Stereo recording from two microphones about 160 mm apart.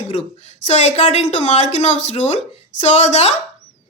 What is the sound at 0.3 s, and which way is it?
Speech, 45° left (ahead or behind).